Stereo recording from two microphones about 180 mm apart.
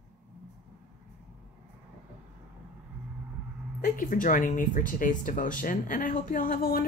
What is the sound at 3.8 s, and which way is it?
Speech, 50° left (ahead or behind).